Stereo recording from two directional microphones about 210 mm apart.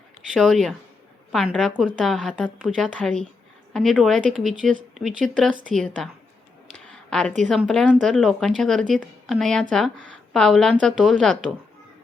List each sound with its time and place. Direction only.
0.3 s a woman's voice: centre (ahead or behind)
5.7 s a woman's voice: centre (ahead or behind)
6.9 s a sound: 5° left (ahead or behind)
7.5 s a woman's voice: centre (ahead or behind)